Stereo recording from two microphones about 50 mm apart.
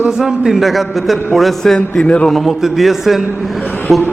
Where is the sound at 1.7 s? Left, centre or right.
Centre.